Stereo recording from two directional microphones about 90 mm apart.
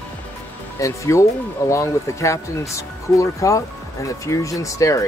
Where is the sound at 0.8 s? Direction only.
35° left (ahead or behind).